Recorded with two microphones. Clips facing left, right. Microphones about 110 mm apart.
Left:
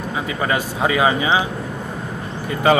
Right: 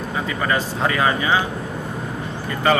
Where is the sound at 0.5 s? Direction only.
15° left (ahead or behind).